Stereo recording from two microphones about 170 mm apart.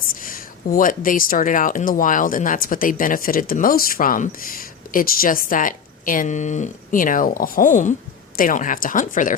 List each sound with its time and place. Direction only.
0.2 s speech: 55° left (ahead or behind)